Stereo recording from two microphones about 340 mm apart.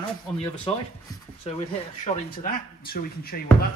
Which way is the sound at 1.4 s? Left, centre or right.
Centre.